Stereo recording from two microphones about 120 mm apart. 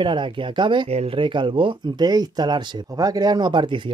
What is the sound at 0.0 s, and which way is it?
Speech, 40° right (ahead or behind).